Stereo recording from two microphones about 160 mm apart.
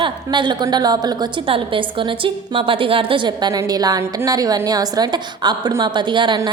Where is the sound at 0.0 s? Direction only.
30° right (ahead or behind).